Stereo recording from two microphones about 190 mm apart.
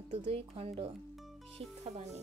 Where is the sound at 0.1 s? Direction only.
30° right (ahead or behind).